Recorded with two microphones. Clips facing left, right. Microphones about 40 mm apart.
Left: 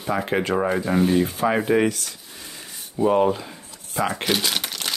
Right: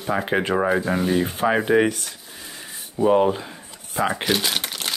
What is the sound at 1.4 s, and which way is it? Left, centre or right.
Speech, centre.